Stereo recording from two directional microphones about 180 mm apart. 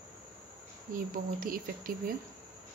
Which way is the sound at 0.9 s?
50° right (ahead or behind).